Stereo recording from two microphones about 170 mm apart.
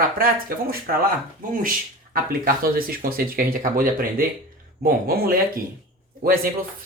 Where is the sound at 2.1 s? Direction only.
55° right (ahead or behind).